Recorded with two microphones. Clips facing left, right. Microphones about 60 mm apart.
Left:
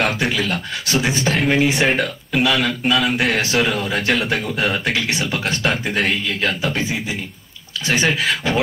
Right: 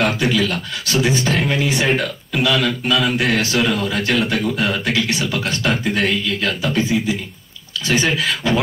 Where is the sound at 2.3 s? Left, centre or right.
Centre.